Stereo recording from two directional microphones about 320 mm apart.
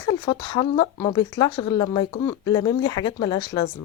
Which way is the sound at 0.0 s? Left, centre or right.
Centre.